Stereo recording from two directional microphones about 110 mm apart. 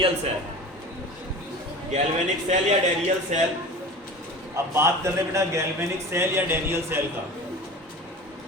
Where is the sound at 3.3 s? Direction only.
90° right.